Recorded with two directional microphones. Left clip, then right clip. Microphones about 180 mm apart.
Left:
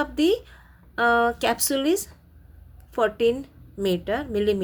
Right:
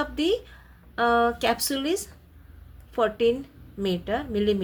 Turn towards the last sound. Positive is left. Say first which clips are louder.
# left 2 dB
turn(degrees=30)  # may be behind; listen again after turning